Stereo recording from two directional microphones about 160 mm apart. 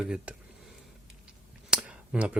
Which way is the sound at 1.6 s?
5° right (ahead or behind).